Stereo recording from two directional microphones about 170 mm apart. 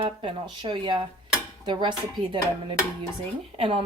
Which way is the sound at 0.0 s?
30° right (ahead or behind).